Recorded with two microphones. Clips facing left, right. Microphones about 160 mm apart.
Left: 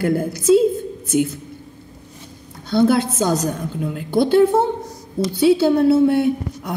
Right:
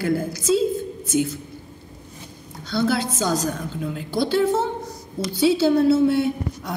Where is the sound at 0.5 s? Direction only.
55° left (ahead or behind).